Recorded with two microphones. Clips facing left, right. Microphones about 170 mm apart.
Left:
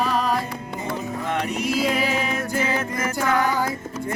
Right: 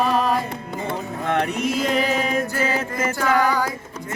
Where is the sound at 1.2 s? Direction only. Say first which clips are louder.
Right 5 dB; 55° right (ahead or behind).